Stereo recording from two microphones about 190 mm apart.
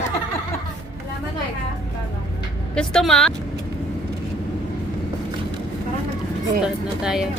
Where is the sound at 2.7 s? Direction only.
5° left (ahead or behind).